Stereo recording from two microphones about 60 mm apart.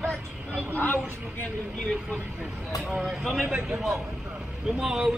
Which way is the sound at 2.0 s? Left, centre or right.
Right.